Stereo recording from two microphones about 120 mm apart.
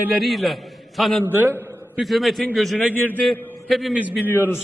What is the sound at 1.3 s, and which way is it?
Speech, 15° right (ahead or behind).